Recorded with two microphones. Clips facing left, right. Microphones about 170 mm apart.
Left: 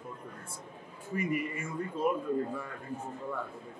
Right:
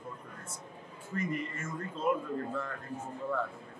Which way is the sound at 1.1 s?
10° left (ahead or behind).